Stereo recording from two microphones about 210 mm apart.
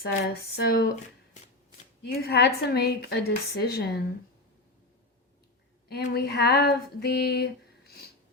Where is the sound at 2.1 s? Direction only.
50° left (ahead or behind).